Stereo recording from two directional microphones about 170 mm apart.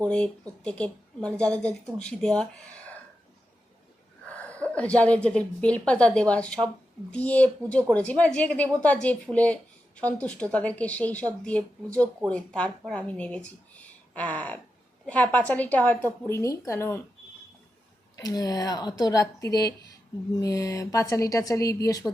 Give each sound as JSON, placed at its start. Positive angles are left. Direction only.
{"t": 0.0, "sound": "speech", "side_deg": 5}
{"t": 4.3, "sound": "a sound", "side_deg": 10}
{"t": 4.7, "sound": "a woman's voice", "side_deg": 5}
{"t": 18.2, "sound": "speech", "side_deg": 20}